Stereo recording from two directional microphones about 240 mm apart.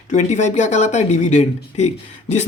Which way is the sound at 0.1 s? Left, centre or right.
Left.